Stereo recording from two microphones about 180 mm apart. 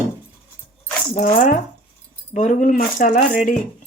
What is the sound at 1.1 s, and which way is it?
Speech, 45° left (ahead or behind).